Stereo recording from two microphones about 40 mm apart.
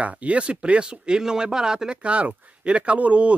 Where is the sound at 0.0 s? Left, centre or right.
Right; by 2.0 s centre.